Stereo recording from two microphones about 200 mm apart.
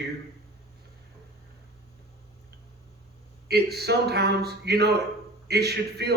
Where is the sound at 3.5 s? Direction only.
55° right (ahead or behind).